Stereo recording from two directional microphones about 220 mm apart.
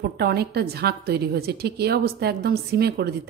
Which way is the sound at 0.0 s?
45° right (ahead or behind).